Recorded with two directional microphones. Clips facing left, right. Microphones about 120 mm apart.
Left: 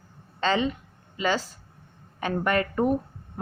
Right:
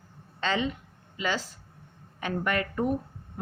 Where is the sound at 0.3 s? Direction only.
35° left (ahead or behind).